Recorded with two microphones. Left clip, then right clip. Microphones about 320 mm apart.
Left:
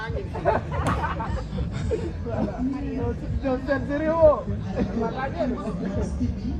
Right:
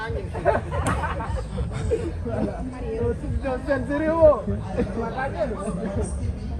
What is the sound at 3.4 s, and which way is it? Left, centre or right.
Speech, centre.